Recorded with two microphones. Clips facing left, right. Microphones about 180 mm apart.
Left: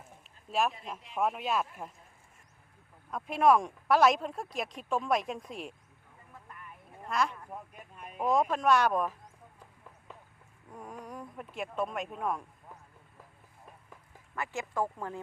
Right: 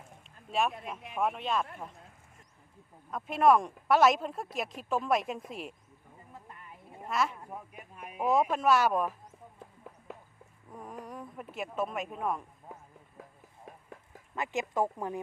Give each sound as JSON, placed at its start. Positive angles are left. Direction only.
{"t": 1.1, "sound": "speech", "side_deg": 0}
{"t": 3.1, "sound": "speech", "side_deg": 0}
{"t": 6.3, "sound": "a sound", "side_deg": -25}
{"t": 7.1, "sound": "speech", "side_deg": -5}
{"t": 10.7, "sound": "speech", "side_deg": 0}
{"t": 14.3, "sound": "speech", "side_deg": -20}